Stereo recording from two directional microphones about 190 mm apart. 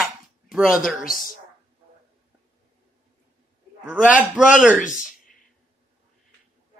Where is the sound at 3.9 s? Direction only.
5° right (ahead or behind).